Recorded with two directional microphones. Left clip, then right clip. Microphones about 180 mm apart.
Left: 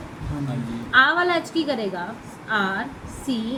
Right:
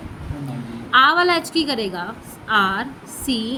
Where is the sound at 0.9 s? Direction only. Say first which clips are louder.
Right 3 dB; 50° right (ahead or behind).